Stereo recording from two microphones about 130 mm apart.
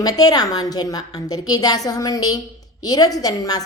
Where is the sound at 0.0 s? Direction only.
30° left (ahead or behind).